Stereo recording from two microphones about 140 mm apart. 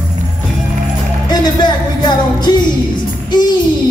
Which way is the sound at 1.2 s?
30° left (ahead or behind).